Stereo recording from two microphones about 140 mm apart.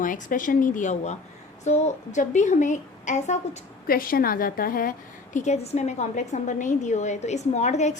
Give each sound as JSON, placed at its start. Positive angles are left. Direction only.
{"t": 0.0, "sound": "a woman's voice", "side_deg": 70}
{"t": 3.8, "sound": "a woman's voice", "side_deg": 90}
{"t": 5.4, "sound": "a woman's voice", "side_deg": 55}